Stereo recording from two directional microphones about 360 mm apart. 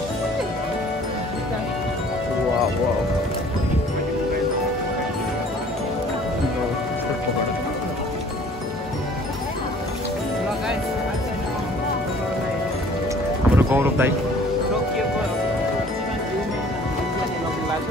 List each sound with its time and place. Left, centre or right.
13.6 s music: centre